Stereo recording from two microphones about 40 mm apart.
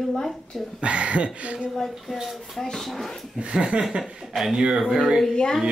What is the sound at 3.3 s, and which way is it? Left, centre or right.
Speech, right.